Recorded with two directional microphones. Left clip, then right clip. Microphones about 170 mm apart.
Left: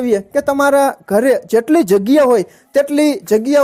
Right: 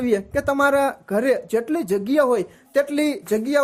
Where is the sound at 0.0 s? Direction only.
30° left (ahead or behind).